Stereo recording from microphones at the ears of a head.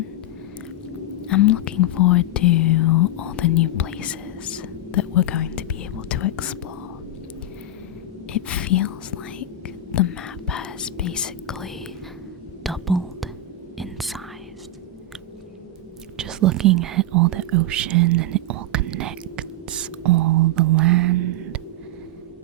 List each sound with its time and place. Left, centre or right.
1.3 s speech: left
8.3 s speech: left
12.6 s whispering: centre
16.1 s whispering: right